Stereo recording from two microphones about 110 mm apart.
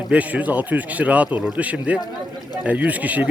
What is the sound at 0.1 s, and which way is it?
A man's voice, 15° right (ahead or behind).